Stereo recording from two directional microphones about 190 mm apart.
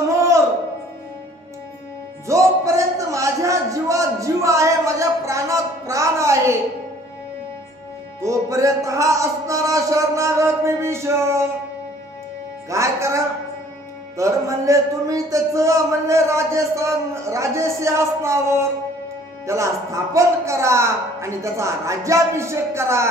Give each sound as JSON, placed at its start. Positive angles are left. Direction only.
{"t": 2.2, "sound": "music", "side_deg": -15}
{"t": 8.2, "sound": "a man's voice", "side_deg": -15}
{"t": 12.6, "sound": "a man's voice", "side_deg": -15}